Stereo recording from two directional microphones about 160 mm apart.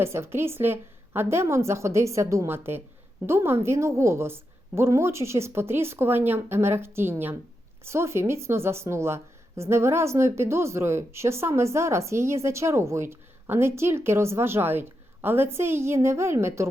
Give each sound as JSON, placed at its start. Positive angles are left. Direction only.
{"t": 0.0, "sound": "a woman's voice", "side_deg": -15}